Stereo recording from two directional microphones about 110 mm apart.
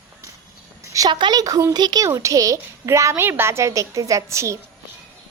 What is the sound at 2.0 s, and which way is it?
A woman's voice, 30° right (ahead or behind).